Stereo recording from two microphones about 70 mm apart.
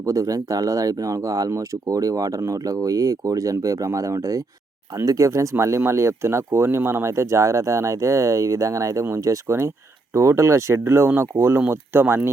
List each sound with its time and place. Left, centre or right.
0.0 s speech: right